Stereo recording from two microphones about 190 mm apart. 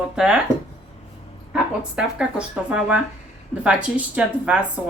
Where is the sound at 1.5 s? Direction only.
5° right (ahead or behind).